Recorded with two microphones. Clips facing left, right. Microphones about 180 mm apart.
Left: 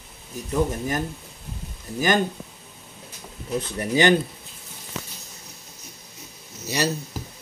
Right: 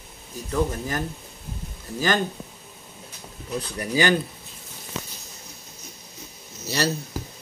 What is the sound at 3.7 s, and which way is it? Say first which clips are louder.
Speech: left 3 dB; 20° left (ahead or behind).